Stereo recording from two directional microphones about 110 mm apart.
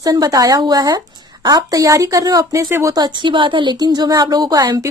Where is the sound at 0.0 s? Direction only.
35° right (ahead or behind).